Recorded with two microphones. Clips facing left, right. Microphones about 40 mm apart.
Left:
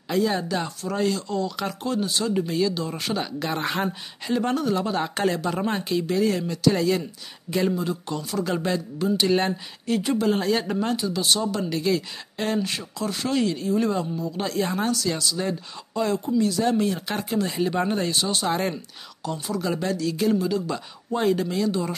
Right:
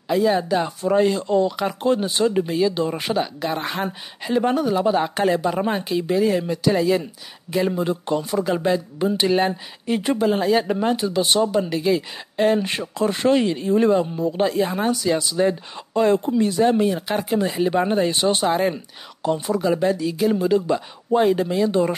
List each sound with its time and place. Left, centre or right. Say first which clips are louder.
0.1 s speech: right 5 dB; centre
3.2 s speech: right 4 dB; centre
4.2 s speech: right 4 dB; centre
7.7 s speech: right 5 dB; right
9.0 s speech: right 2 dB; right
11.5 s speech: right 4 dB; centre
12.6 s speech: right 6 dB; right
14.4 s speech: right 4 dB; centre
18.5 s speech: right 5 dB; centre
19.2 s speech: right 7 dB; right
19.6 s speech: right 3 dB; centre
20.4 s speech: right 7 dB; right
20.7 s speech: right 8 dB; centre